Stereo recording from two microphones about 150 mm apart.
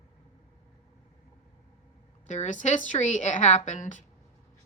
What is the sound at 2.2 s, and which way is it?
A woman's voice, 55° left (ahead or behind).